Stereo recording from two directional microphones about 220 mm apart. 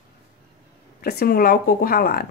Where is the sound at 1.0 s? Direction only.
45° left (ahead or behind).